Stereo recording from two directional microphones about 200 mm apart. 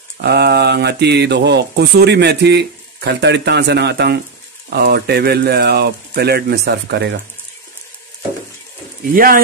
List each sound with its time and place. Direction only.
0.2 s speech: 55° right (ahead or behind)
9.1 s speech: 45° right (ahead or behind)